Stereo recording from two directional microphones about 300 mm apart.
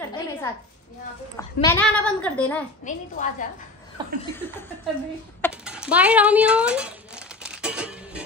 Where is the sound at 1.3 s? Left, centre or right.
Centre.